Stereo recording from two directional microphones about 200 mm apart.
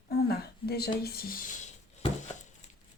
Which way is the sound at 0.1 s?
50° left (ahead or behind).